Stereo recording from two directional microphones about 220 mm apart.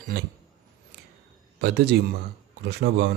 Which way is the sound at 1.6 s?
50° right (ahead or behind).